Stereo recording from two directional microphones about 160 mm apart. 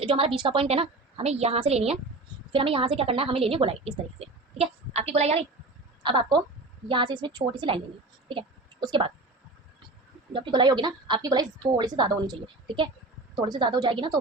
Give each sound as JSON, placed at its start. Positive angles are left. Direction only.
{"t": 0.0, "sound": "a woman's voice", "side_deg": -35}
{"t": 6.0, "sound": "a woman's voice", "side_deg": -30}
{"t": 10.3, "sound": "a woman's voice", "side_deg": -30}